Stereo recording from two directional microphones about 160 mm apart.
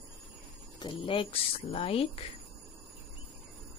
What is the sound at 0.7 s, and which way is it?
Speech, 30° left (ahead or behind).